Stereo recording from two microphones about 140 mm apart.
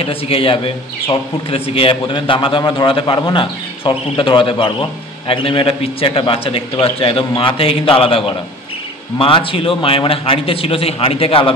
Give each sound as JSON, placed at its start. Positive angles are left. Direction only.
{"t": 0.0, "sound": "a man's voice", "side_deg": 40}
{"t": 9.2, "sound": "a man's voice", "side_deg": 40}